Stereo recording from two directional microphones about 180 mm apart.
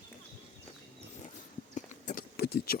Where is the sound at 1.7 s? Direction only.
45° left (ahead or behind).